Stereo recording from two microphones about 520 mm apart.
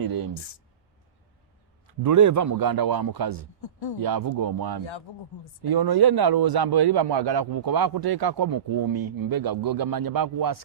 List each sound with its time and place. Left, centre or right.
0.0 s a sound: right
0.3 s speech: left
2.0 s speech: right
3.6 s speech: left
4.0 s a man's voice: right